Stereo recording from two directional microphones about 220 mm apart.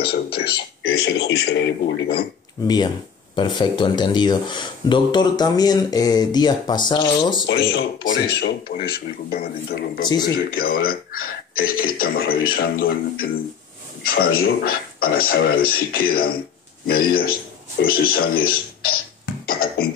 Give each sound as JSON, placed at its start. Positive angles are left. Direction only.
{"t": 0.8, "sound": "speech", "side_deg": 65}
{"t": 1.2, "sound": "a man's voice", "side_deg": 45}
{"t": 2.6, "sound": "speech", "side_deg": 20}
{"t": 7.4, "sound": "a man's voice", "side_deg": 55}
{"t": 10.0, "sound": "speech", "side_deg": 20}
{"t": 10.5, "sound": "a man's voice", "side_deg": 40}